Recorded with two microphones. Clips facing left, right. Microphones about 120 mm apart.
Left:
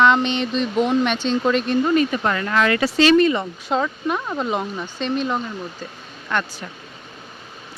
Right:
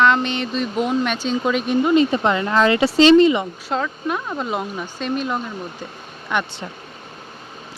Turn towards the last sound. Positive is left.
turn(degrees=-15)  # may be behind; listen again after turning